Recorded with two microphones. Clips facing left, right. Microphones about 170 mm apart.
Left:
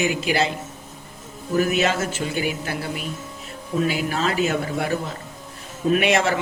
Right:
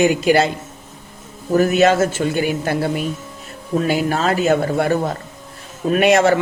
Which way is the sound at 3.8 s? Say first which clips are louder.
Right 4 dB; 45° right (ahead or behind).